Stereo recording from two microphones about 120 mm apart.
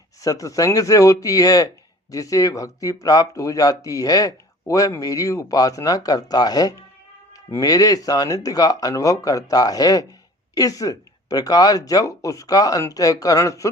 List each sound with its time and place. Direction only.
0.2 s speech: 30° left (ahead or behind)